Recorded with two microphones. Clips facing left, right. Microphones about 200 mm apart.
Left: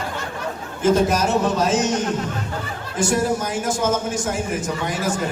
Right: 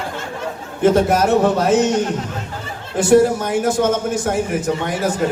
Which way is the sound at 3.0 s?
60° right (ahead or behind).